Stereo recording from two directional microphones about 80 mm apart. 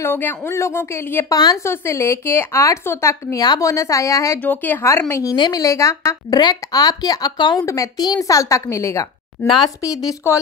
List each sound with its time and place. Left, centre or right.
0.0 s a woman's voice: left
1.3 s a woman's voice: left
1.6 s a woman's voice: left
3.3 s a woman's voice: left
3.7 s a woman's voice: left
4.4 s speech: left
4.8 s a woman's voice: left
5.3 s speech: left
5.6 s a woman's voice: left
6.3 s speech: left
7.5 s a woman's voice: left